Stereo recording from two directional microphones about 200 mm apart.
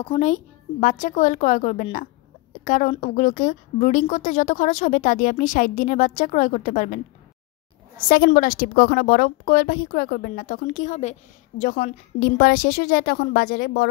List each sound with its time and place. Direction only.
0.0 s a woman's voice: 30° left (ahead or behind)
8.3 s speech: 45° left (ahead or behind)